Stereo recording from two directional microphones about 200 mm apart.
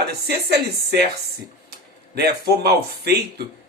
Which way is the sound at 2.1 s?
50° right (ahead or behind).